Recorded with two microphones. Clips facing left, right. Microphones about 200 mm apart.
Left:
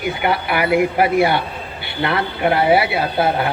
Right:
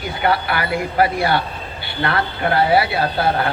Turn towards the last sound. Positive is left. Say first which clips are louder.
# left 1 dB
turn(degrees=20)  # may be behind; listen again after turning